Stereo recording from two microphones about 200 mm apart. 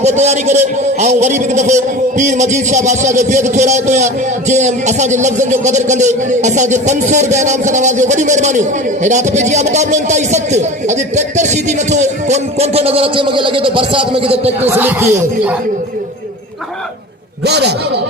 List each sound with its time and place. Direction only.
0.0 s a man's voice: 35° right (ahead or behind)
14.6 s speech: 10° right (ahead or behind)
17.4 s a man's voice: 55° right (ahead or behind)